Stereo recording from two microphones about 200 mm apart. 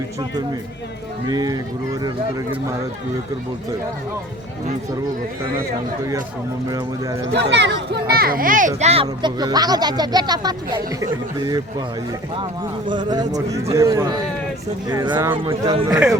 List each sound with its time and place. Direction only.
1.3 s speech: 20° right (ahead or behind)
6.7 s speech: 15° right (ahead or behind)
7.3 s speech: 60° right (ahead or behind); by 8.7 s 40° right (ahead or behind)
8.8 s speech: 30° right (ahead or behind)
12.9 s speech: 20° right (ahead or behind)